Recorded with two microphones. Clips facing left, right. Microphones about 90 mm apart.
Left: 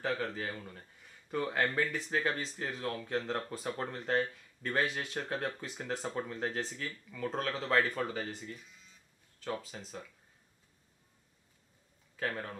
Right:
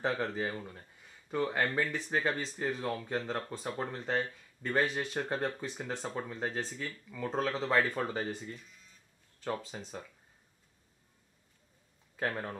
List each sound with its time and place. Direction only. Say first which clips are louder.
0.0 s speech: right 2 dB; 25° right (ahead or behind)
0.7 s a sound: right 1 dB; 5° right (ahead or behind)
1.8 s speech: right 1 dB; centre (ahead or behind)
8.0 s speech: right 1 dB; 25° right (ahead or behind)
9.4 s speech: right 2 dB; 25° right (ahead or behind)
12.2 s speech: right 2 dB; 20° right (ahead or behind)